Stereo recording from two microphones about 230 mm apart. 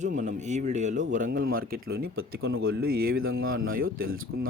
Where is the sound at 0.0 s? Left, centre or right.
Right.